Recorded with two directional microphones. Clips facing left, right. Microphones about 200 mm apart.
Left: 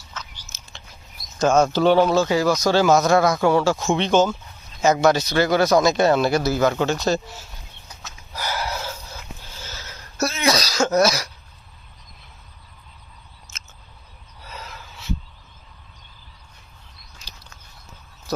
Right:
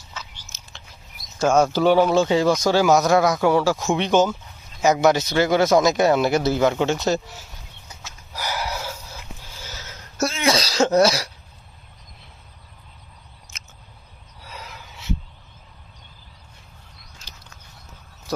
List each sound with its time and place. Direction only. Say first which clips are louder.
0.1 s biting: even; 5° right (ahead or behind)
1.4 s speech: even; 10° right (ahead or behind)
2.2 s speech: right 1 dB; 25° right (ahead or behind)
2.6 s speech: left 2 dB; 15° right (ahead or behind)
8.0 s a sound: left 1 dB; 15° right (ahead or behind)
10.4 s throat clearing: right 1 dB; 30° right (ahead or behind)
13.5 s a sound: even; 15° right (ahead or behind)